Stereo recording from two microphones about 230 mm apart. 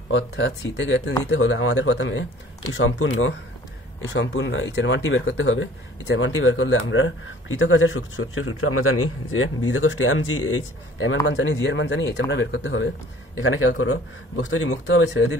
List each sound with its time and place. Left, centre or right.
0.1 s speech: left
4.1 s speech: left